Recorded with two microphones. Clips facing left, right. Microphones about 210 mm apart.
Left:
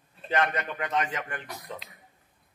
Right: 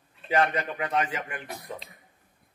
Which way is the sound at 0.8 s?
10° right (ahead or behind).